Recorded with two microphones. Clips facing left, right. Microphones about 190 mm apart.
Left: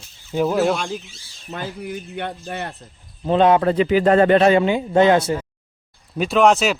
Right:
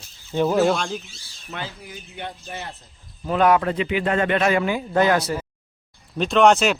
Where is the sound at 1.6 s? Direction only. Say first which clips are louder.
Left 8 dB; 55° left (ahead or behind).